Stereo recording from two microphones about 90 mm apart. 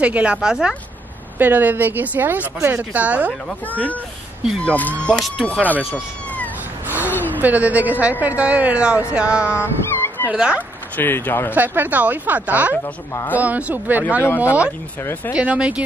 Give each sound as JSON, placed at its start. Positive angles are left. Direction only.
{"t": 0.0, "sound": "a woman's voice", "side_deg": -15}
{"t": 1.4, "sound": "a woman's voice", "side_deg": -20}
{"t": 3.6, "sound": "speech", "side_deg": 15}
{"t": 5.1, "sound": "speech", "side_deg": 5}
{"t": 5.6, "sound": "speech", "side_deg": 15}
{"t": 6.9, "sound": "a sound", "side_deg": -20}
{"t": 7.3, "sound": "a woman's voice", "side_deg": -20}
{"t": 9.5, "sound": "dog", "side_deg": 25}
{"t": 10.3, "sound": "a woman's voice", "side_deg": -10}
{"t": 11.0, "sound": "speech", "side_deg": 25}
{"t": 11.5, "sound": "speech", "side_deg": -20}
{"t": 12.8, "sound": "a woman's voice", "side_deg": 35}
{"t": 13.4, "sound": "a woman's voice", "side_deg": -15}